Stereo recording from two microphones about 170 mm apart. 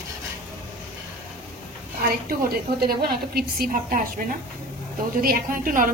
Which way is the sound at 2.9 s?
65° right (ahead or behind).